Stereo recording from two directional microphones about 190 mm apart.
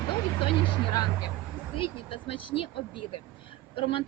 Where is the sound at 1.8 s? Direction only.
30° left (ahead or behind).